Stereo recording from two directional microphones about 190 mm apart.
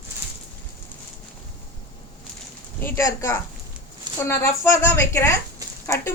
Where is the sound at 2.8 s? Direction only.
15° left (ahead or behind).